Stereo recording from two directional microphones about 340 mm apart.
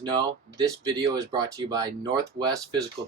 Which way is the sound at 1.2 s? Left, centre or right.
Centre.